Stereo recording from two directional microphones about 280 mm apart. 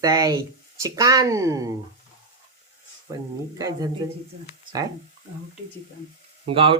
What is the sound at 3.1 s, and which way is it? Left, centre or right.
Speech, centre.